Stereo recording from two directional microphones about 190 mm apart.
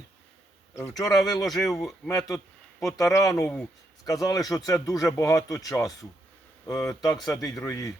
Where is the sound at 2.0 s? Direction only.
15° left (ahead or behind).